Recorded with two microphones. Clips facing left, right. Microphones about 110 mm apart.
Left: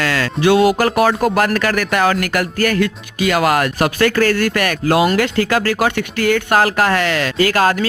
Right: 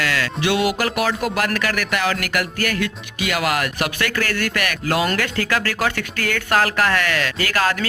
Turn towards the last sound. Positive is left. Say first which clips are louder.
# left 6 dB
turn(degrees=30)  # may be behind; listen again after turning